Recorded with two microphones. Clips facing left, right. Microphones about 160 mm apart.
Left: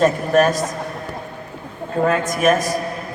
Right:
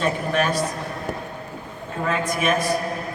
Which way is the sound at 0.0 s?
45° left (ahead or behind).